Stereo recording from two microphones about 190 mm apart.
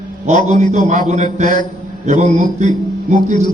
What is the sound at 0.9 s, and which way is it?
A man's voice, 40° right (ahead or behind).